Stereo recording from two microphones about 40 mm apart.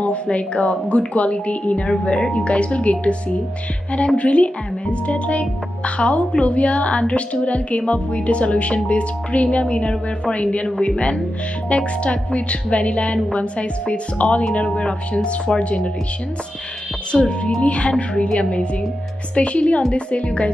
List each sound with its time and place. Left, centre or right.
0.0 s a woman's voice: left
4.2 s a woman's voice: left
17.1 s a woman's voice: left